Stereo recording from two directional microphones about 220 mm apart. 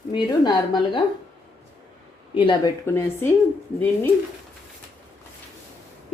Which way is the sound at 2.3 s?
20° left (ahead or behind).